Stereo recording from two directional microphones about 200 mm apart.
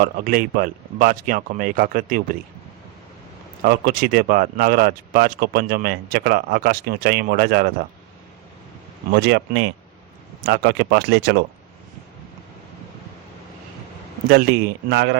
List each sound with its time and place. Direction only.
0.0 s speech: 45° right (ahead or behind)
3.7 s speech: 45° right (ahead or behind)
9.1 s speech: 55° right (ahead or behind)
14.3 s speech: 50° right (ahead or behind)